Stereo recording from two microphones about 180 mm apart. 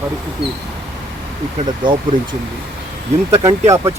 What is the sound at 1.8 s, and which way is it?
Speech, 25° right (ahead or behind).